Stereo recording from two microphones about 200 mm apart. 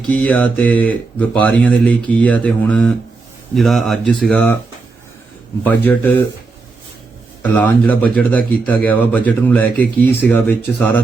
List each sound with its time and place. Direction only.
0.1 s speech: 5° left (ahead or behind)
5.6 s speech: 10° left (ahead or behind)
7.4 s speech: 10° left (ahead or behind)